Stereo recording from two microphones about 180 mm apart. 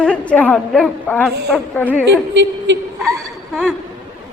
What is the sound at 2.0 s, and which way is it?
Speech, 80° right.